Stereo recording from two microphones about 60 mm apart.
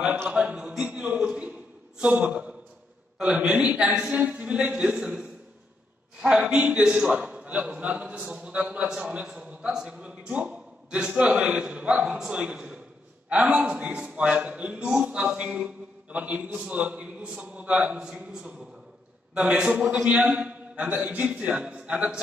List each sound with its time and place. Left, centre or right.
0.3 s a sound: centre
2.2 s a woman's voice: centre
19.3 s a man's voice: right
19.6 s a woman's voice: centre
20.3 s a man's voice: right